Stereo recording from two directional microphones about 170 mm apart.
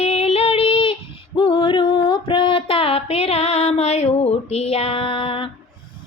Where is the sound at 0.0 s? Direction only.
35° left (ahead or behind).